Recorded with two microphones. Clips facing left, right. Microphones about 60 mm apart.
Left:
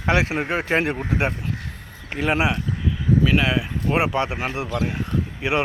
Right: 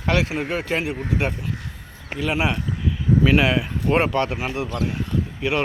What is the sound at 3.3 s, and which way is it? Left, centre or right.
Speech, centre.